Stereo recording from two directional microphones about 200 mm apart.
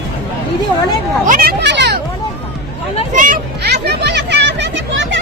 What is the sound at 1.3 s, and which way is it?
Speech, 50° right (ahead or behind).